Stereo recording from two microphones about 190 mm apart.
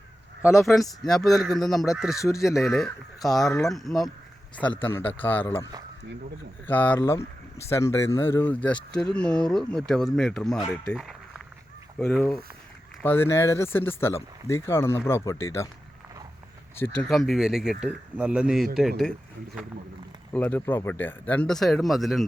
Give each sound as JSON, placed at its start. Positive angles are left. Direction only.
{"t": 0.6, "sound": "speech", "side_deg": 0}
{"t": 2.1, "sound": "speech", "side_deg": 15}
{"t": 2.7, "sound": "speech", "side_deg": 0}
{"t": 3.3, "sound": "speech", "side_deg": 15}
{"t": 3.7, "sound": "speech", "side_deg": 0}
{"t": 6.7, "sound": "speech", "side_deg": 10}
{"t": 10.8, "sound": "a sound", "side_deg": 0}
{"t": 11.9, "sound": "speech", "side_deg": 5}
{"t": 16.7, "sound": "speech", "side_deg": 10}
{"t": 20.3, "sound": "speech", "side_deg": 10}